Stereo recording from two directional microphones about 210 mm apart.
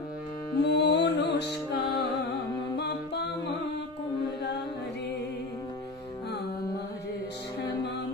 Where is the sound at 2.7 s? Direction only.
55° left (ahead or behind).